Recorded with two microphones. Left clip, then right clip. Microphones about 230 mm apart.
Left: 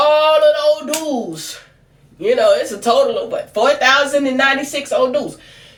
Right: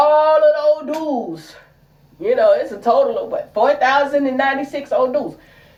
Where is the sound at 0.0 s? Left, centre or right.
Left.